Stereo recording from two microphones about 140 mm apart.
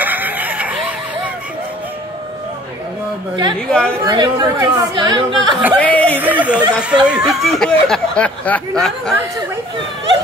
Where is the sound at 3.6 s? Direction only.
5° left (ahead or behind).